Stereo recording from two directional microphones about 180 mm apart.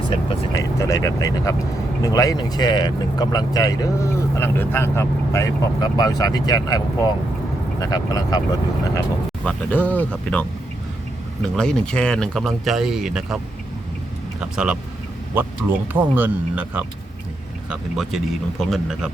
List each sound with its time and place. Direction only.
0.1 s speech: 20° left (ahead or behind)
9.0 s speech: 10° left (ahead or behind)
11.4 s speech: 5° left (ahead or behind)
14.4 s speech: 5° right (ahead or behind)
15.9 s speech: 10° right (ahead or behind)